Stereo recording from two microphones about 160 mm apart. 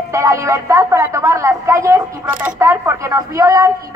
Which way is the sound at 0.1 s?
20° right (ahead or behind).